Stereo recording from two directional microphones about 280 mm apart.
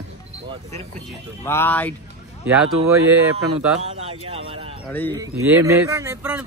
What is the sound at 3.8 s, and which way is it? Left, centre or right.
Speech, right.